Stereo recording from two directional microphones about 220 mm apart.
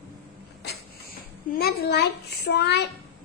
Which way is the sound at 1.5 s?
45° left (ahead or behind).